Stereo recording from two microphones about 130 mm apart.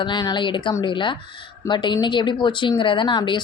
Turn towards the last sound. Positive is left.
turn(degrees=35)  # may be behind; listen again after turning